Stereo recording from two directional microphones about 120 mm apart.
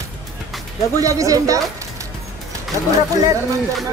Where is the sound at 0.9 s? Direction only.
25° right (ahead or behind).